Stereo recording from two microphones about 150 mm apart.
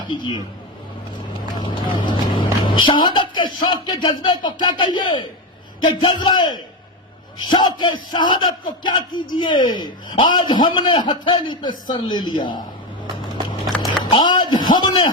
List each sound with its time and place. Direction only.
0.1 s a man's voice: 30° left (ahead or behind)
1.5 s vehicle: 30° left (ahead or behind)
2.6 s a man's voice: 35° left (ahead or behind)
13.8 s speech: 30° left (ahead or behind)